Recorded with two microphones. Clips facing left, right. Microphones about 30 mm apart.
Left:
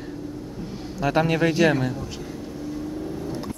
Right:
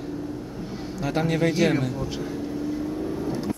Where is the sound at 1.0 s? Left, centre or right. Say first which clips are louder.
Left 3 dB; left.